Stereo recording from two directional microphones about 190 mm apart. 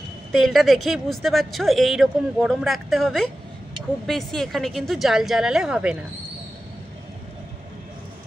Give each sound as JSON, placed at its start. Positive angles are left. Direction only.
{"t": 0.3, "sound": "speech", "side_deg": 0}